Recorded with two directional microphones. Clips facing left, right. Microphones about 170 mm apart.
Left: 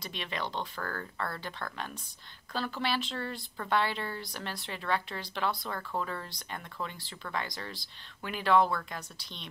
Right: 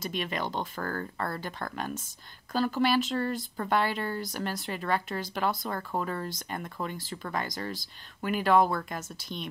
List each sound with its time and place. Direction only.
0.0 s speech: 45° right (ahead or behind)